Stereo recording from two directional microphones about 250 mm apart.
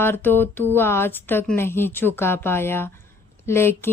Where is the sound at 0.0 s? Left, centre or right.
Centre.